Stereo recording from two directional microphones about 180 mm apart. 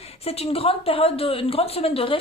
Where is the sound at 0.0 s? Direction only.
35° left (ahead or behind).